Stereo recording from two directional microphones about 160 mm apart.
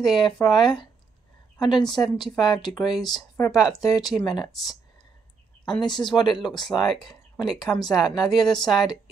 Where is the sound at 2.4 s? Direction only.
25° left (ahead or behind).